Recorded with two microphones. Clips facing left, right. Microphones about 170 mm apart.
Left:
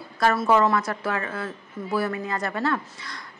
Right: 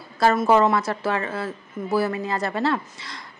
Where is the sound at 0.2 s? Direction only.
25° right (ahead or behind).